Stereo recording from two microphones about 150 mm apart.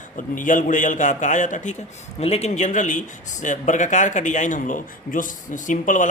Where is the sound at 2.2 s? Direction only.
45° left (ahead or behind).